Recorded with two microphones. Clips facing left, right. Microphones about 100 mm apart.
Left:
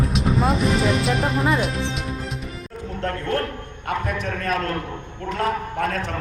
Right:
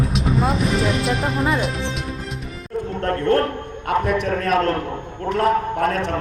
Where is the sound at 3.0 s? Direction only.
45° right (ahead or behind).